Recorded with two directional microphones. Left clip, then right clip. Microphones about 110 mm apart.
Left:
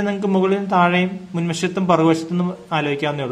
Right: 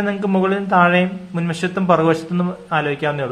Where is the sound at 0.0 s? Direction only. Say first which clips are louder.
Even; 20° left (ahead or behind).